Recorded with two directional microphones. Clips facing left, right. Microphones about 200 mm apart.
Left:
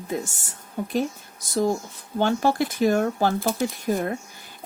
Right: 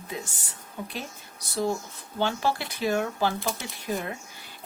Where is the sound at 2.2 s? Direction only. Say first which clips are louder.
Left 6 dB; 50° left (ahead or behind).